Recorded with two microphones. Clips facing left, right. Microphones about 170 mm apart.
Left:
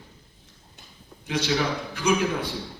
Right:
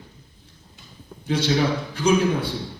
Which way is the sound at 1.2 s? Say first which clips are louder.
Right 4 dB; 30° right (ahead or behind).